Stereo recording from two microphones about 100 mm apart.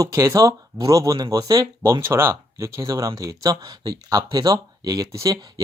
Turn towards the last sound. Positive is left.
turn(degrees=-40)  # may be behind; listen again after turning